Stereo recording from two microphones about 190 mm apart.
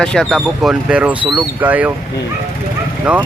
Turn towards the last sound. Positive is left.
turn(degrees=-5)  # may be behind; listen again after turning